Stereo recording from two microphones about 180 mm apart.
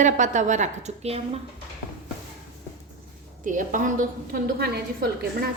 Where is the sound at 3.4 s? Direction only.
45° right (ahead or behind).